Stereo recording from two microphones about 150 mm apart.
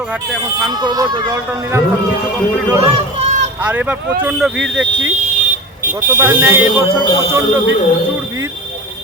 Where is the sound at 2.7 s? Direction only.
45° right (ahead or behind).